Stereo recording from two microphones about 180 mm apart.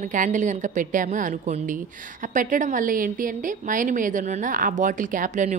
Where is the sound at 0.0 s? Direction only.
45° right (ahead or behind).